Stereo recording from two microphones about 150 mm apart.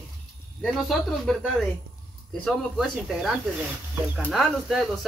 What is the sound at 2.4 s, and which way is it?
Speech, centre (ahead or behind).